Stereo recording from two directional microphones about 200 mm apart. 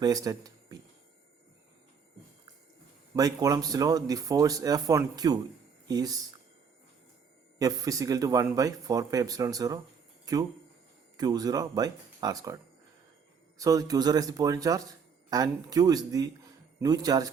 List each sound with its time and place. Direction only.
0.0 s speech: 20° right (ahead or behind)
3.2 s speech: 15° right (ahead or behind)
7.6 s speech: 15° right (ahead or behind)
13.6 s speech: 15° right (ahead or behind)